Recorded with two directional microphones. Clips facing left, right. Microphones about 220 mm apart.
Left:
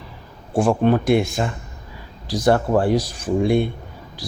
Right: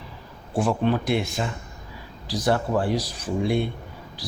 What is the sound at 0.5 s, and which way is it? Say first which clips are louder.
Speech: left 5 dB; 50° left (ahead or behind).